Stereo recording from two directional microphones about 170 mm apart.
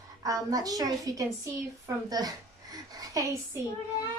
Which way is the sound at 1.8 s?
20° right (ahead or behind).